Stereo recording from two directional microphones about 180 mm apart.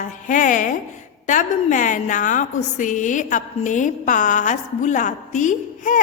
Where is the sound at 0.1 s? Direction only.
45° left (ahead or behind).